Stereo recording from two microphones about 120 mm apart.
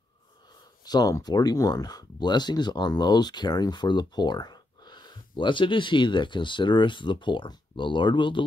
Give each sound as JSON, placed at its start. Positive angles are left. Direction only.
{"t": 0.8, "sound": "speech", "side_deg": 30}